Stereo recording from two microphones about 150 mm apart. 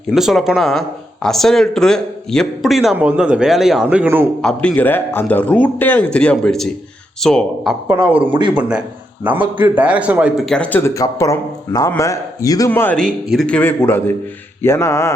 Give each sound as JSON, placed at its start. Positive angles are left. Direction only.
{"t": 0.1, "sound": "speech", "side_deg": 0}
{"t": 4.4, "sound": "speech", "side_deg": 5}
{"t": 8.2, "sound": "speech", "side_deg": -30}
{"t": 9.2, "sound": "a man's voice", "side_deg": -10}
{"t": 13.2, "sound": "speech", "side_deg": 0}
{"t": 13.6, "sound": "speech", "side_deg": 15}